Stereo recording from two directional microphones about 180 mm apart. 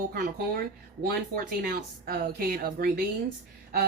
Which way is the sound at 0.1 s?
55° right (ahead or behind).